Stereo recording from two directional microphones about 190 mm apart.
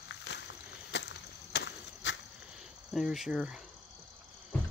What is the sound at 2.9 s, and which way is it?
Speech, centre (ahead or behind).